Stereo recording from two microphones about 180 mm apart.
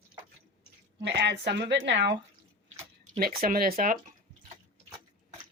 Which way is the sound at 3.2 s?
50° right (ahead or behind).